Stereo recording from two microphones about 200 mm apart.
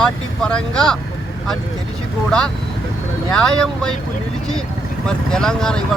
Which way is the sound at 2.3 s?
5° left (ahead or behind).